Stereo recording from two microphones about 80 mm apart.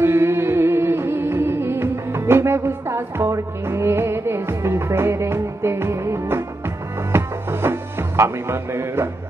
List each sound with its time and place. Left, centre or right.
0.0 s music: right